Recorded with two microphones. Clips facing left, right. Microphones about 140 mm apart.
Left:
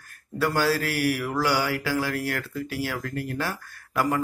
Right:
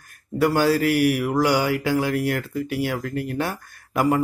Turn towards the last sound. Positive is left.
turn(degrees=-15)  # may be behind; listen again after turning